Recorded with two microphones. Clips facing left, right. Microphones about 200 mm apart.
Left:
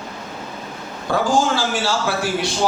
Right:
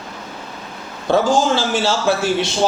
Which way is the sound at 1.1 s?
25° right (ahead or behind).